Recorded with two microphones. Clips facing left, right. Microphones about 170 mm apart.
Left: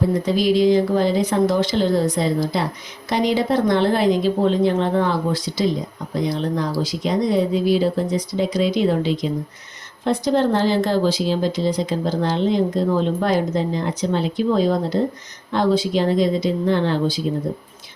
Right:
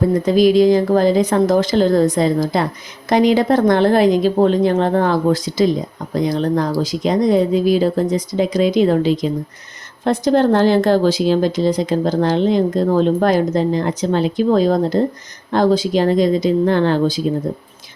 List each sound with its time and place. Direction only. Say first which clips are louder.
0.3 s a woman's voice: right 5 dB; 45° right (ahead or behind)